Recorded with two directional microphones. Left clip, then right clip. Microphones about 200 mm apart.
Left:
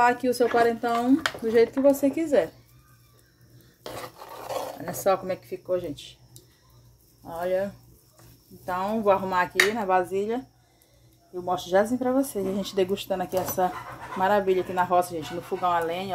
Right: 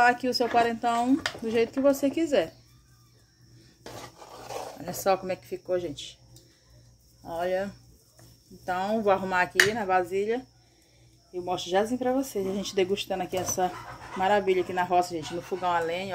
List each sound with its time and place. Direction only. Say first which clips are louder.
0.0 s speech: left 1 dB; 5° right (ahead or behind)
4.9 s speech: left 2 dB; 10° right (ahead or behind)
7.2 s speech: left 2 dB; 5° right (ahead or behind)
11.4 s speech: left 4 dB; centre (ahead or behind)